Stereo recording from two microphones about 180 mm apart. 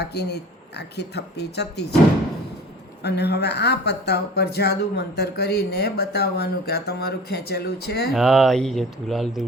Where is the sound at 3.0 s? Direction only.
65° left (ahead or behind).